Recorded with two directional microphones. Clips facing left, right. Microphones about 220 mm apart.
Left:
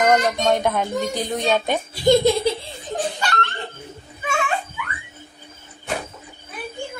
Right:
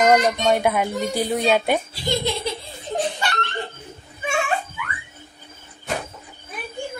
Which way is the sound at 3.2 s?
20° right (ahead or behind).